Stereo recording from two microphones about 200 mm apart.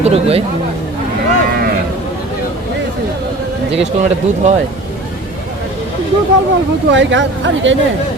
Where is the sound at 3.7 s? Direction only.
35° right (ahead or behind).